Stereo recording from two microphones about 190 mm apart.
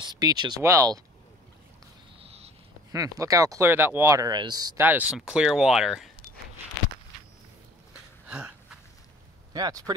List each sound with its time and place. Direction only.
0.0 s speech: 20° right (ahead or behind)
2.1 s a sound: 30° right (ahead or behind)
2.9 s speech: 15° right (ahead or behind)
8.3 s gasp: 5° right (ahead or behind)
9.5 s speech: 20° right (ahead or behind)